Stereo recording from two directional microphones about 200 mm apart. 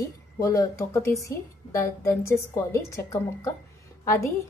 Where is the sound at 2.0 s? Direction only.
15° left (ahead or behind).